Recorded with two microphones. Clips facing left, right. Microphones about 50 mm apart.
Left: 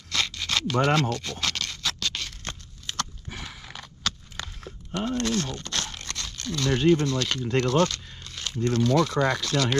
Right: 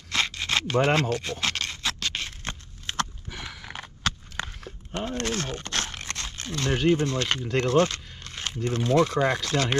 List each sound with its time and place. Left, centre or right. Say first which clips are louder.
0.1 s a sound: right 2 dB; right
5.9 s crunch: right 2 dB; right
7.1 s speech: even; right